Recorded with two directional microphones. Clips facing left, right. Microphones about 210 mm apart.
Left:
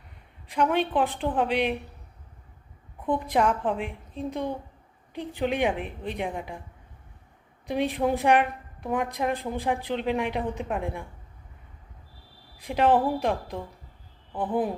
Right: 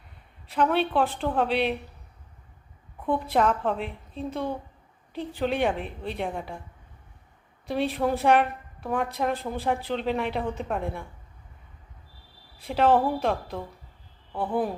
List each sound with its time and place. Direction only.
0.4 s a woman's voice: 15° left (ahead or behind)
3.2 s a woman's voice: 15° left (ahead or behind)
7.7 s a woman's voice: 15° left (ahead or behind)
12.5 s a woman's voice: 15° left (ahead or behind)